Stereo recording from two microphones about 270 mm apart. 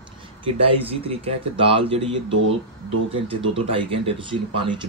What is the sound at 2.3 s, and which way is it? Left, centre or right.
Speech, right.